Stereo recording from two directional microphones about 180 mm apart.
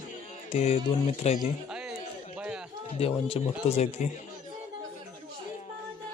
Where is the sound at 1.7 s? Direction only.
5° right (ahead or behind).